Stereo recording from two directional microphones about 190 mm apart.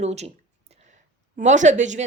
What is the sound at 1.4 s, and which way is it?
Speech, 40° right (ahead or behind).